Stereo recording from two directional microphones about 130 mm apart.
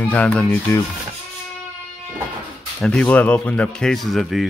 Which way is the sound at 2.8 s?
10° left (ahead or behind).